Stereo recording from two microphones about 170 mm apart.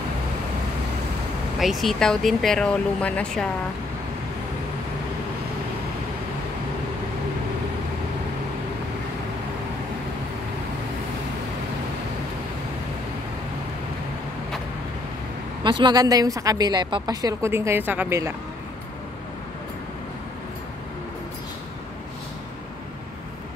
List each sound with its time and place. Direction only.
1.6 s speech: centre (ahead or behind)
15.6 s a woman's voice: 25° right (ahead or behind)